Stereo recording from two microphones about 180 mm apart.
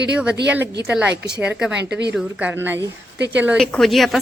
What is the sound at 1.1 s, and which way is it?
Speech, 70° right (ahead or behind).